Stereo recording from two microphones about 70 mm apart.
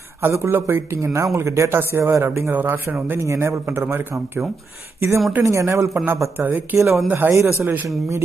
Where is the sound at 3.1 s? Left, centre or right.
Right.